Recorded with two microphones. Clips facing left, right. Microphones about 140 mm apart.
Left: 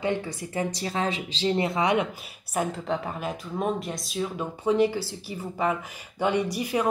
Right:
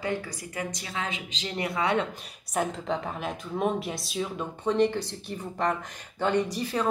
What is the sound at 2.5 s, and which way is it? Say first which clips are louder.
Speech: left 1 dB; centre (ahead or behind).